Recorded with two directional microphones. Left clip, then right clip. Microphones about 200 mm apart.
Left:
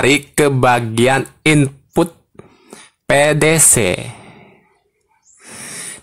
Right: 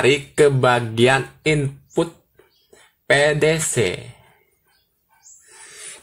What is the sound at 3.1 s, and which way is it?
Speech, 50° left (ahead or behind).